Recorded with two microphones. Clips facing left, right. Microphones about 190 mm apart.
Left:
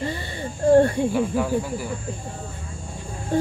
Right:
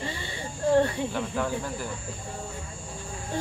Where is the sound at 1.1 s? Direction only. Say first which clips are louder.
Left 7 dB; 10° left (ahead or behind).